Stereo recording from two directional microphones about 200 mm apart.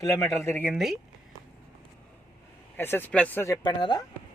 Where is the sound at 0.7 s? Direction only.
Centre (ahead or behind).